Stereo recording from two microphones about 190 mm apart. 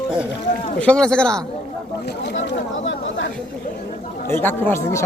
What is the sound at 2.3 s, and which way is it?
Speech, 80° left.